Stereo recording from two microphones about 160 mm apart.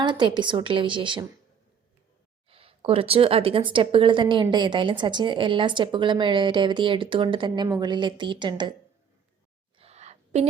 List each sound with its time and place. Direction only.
0.0 s a woman's voice: 30° right (ahead or behind)
2.5 s a woman's voice: 35° right (ahead or behind)
9.7 s a sound: 40° right (ahead or behind)